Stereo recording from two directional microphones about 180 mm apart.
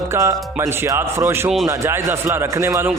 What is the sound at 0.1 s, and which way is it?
A man's voice, 15° right (ahead or behind).